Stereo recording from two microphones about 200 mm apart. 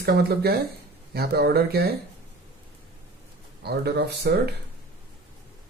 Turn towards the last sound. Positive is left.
turn(degrees=-55)  # may be behind; listen again after turning